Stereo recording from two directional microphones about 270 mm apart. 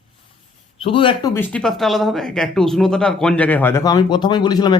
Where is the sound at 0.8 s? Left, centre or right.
Centre.